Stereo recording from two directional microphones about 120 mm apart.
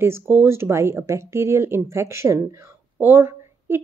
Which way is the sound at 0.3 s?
20° right (ahead or behind).